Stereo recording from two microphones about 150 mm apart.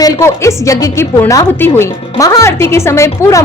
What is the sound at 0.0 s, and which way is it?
A woman's voice, 20° left (ahead or behind).